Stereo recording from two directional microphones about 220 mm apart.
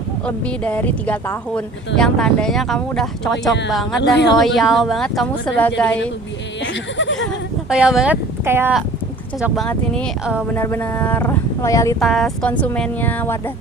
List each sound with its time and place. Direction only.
0.3 s speech: 5° left (ahead or behind)
6.7 s speech: 55° left (ahead or behind)
7.7 s speech: 5° right (ahead or behind)
9.4 s speech: centre (ahead or behind)
10.5 s speech: 10° left (ahead or behind)
11.9 s speech: centre (ahead or behind)